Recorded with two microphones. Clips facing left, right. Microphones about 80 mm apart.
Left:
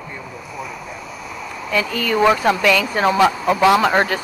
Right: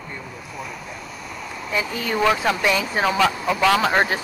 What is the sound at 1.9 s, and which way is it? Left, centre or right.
Speech, centre.